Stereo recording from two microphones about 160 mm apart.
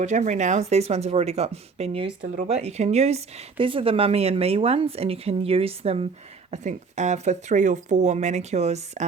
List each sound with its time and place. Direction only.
0.0 s speech: 50° right (ahead or behind)
2.2 s speech: 50° right (ahead or behind)